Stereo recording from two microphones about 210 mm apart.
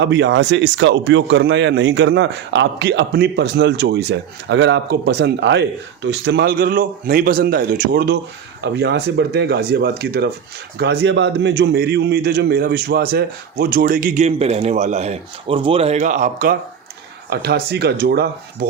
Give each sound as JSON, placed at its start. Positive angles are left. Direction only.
{"t": 0.0, "sound": "a man's voice", "side_deg": -60}
{"t": 17.2, "sound": "a man's voice", "side_deg": -50}